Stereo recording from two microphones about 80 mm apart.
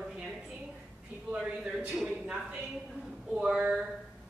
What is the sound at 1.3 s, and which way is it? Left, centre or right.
Speech, centre.